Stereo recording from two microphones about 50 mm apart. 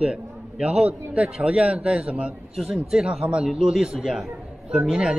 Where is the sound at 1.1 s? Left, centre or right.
Right.